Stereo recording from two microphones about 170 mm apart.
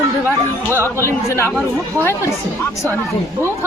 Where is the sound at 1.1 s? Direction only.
15° left (ahead or behind).